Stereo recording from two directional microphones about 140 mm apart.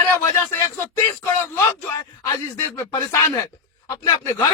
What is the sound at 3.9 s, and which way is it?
Speech, 25° left (ahead or behind).